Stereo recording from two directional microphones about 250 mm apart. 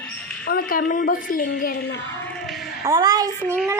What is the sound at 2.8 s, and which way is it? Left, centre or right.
Speech, centre.